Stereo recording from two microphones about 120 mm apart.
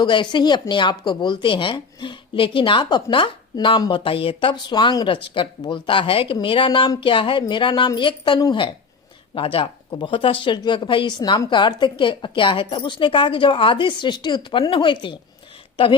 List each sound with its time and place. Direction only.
0.0 s speech: 40° left (ahead or behind)